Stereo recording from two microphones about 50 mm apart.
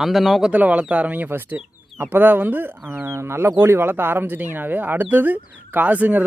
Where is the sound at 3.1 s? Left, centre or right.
Right.